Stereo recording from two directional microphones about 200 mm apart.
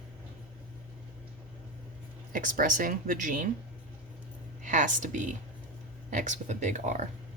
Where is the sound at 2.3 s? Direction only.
40° right (ahead or behind).